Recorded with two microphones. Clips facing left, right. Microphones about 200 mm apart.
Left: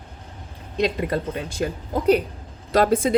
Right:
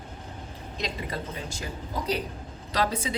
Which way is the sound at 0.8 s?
60° left (ahead or behind).